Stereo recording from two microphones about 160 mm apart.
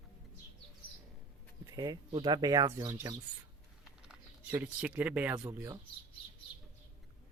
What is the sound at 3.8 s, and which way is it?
Patter, 5° right (ahead or behind).